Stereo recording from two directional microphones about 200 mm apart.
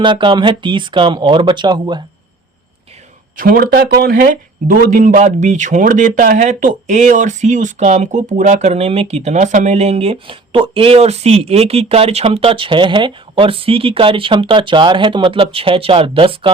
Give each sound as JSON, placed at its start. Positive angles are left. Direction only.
{"t": 0.0, "sound": "speech", "side_deg": -25}
{"t": 3.3, "sound": "speech", "side_deg": -45}